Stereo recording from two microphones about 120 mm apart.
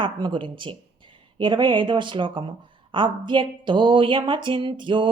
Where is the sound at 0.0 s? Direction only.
40° right (ahead or behind).